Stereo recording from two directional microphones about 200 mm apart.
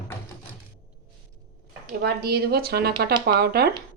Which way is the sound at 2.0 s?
50° right (ahead or behind).